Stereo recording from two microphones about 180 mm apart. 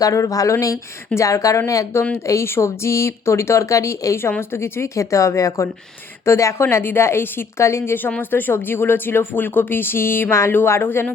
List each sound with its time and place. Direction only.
0.0 s speech: 20° left (ahead or behind)